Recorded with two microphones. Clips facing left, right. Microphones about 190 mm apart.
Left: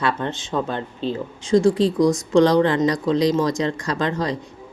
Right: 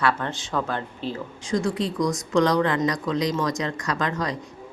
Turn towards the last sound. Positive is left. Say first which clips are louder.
# left 4 dB
turn(degrees=30)  # may be behind; listen again after turning